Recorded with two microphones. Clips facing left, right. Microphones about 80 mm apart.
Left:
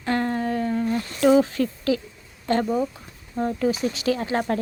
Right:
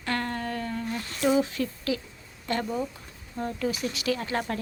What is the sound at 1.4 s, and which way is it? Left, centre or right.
Speech, left.